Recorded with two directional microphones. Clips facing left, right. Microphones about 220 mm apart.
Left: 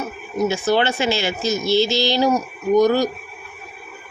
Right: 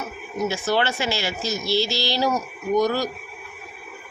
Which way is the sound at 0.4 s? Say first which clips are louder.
Left 4 dB; 20° left (ahead or behind).